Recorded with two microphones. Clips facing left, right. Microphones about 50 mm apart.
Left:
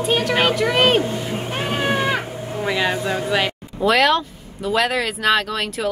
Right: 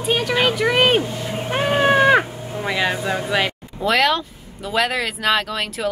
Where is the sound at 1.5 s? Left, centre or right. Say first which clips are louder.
Right 6 dB; centre.